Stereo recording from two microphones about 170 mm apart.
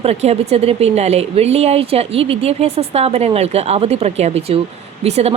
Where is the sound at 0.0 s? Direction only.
40° right (ahead or behind).